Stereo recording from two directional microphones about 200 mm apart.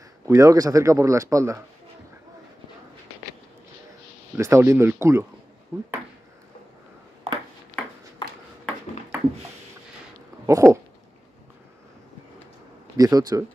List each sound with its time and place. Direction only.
0.3 s speech: 15° right (ahead or behind)
4.4 s speech: 15° right (ahead or behind)
7.3 s ping: 30° right (ahead or behind)
10.4 s dog: 15° right (ahead or behind)
12.9 s speech: 20° right (ahead or behind)